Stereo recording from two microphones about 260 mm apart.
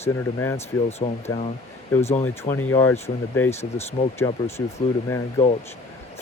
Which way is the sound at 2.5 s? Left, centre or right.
Centre.